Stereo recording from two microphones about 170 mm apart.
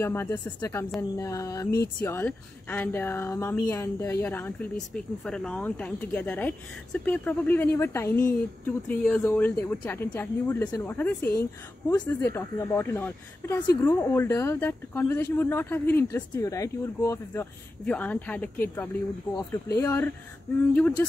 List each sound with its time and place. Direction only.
0.0 s speech: 10° left (ahead or behind)
1.1 s a sound: 20° left (ahead or behind)
2.0 s speech: 10° left (ahead or behind)